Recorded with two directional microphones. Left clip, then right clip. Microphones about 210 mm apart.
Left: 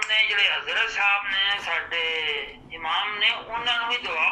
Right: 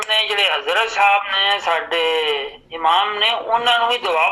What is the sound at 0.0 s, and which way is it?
Speech, 40° right (ahead or behind).